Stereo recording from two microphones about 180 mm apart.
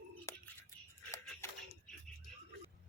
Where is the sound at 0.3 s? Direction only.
15° left (ahead or behind).